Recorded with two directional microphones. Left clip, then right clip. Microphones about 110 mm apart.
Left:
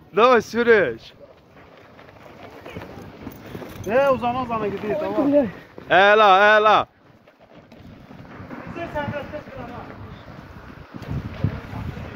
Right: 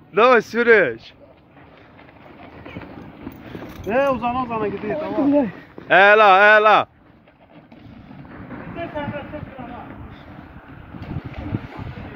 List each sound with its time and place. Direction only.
0.1 s speech: 40° left (ahead or behind)
3.9 s speech: 40° left (ahead or behind)
8.9 s vehicle: 35° left (ahead or behind)